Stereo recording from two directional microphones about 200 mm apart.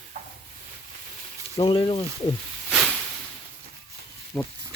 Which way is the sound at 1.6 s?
25° left (ahead or behind).